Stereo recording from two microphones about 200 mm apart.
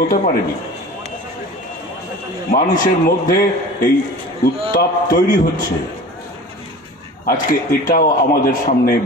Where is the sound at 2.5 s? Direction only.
45° left (ahead or behind).